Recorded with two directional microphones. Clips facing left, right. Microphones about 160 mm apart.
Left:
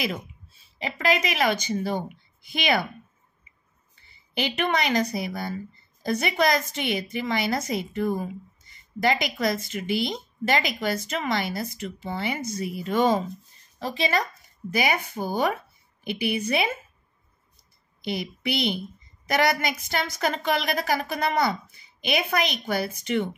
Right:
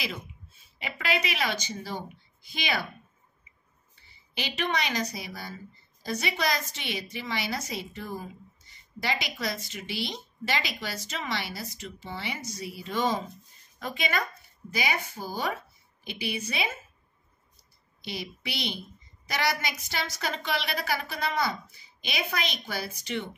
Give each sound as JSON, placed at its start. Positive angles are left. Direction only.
{"t": 0.5, "sound": "speech", "side_deg": 35}
{"t": 4.4, "sound": "a woman's voice", "side_deg": 55}
{"t": 13.7, "sound": "speech", "side_deg": 35}
{"t": 14.7, "sound": "a woman's voice", "side_deg": 55}
{"t": 18.0, "sound": "a woman's voice", "side_deg": 55}